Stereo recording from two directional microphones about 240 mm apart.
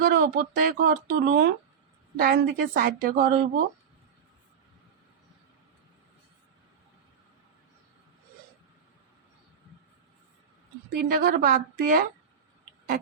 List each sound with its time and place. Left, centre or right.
0.0 s speech: right
10.8 s speech: right